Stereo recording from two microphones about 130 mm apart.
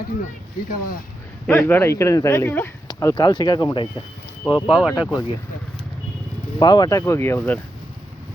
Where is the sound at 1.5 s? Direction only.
15° left (ahead or behind).